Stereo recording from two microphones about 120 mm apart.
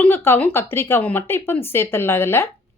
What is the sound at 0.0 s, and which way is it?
A woman's voice, 20° left (ahead or behind).